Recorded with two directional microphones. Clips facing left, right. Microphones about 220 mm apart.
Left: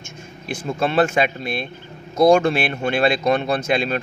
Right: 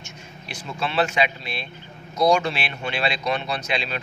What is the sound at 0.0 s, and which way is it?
Speech, 50° left (ahead or behind).